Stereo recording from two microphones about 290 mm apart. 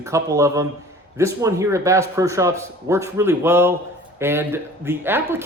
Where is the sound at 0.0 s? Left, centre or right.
Centre.